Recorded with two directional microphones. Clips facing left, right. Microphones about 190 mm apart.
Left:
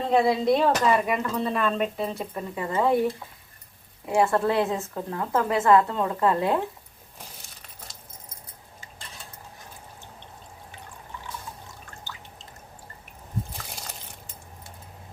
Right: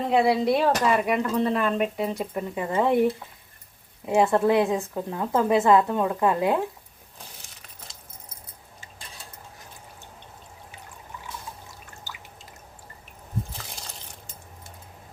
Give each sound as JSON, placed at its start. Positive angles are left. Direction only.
{"t": 0.1, "sound": "speech", "side_deg": -10}
{"t": 4.0, "sound": "speech", "side_deg": -20}